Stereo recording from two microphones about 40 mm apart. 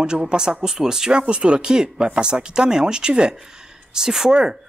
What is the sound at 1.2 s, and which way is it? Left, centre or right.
Speech, right.